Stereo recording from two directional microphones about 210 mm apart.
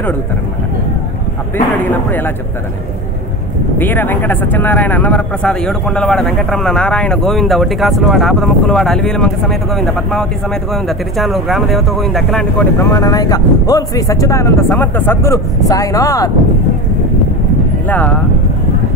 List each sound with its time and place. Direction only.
1.8 s speech: 10° left (ahead or behind)
3.7 s a man's voice: 10° left (ahead or behind)
12.7 s speech: 15° left (ahead or behind)
17.8 s speech: 10° left (ahead or behind)